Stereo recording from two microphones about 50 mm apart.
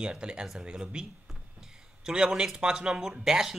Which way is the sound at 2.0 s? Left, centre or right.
Centre.